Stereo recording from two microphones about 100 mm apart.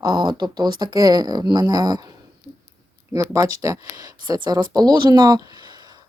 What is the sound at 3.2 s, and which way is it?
Speech, 35° right (ahead or behind).